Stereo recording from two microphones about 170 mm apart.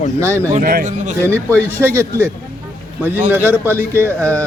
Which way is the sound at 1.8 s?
15° right (ahead or behind).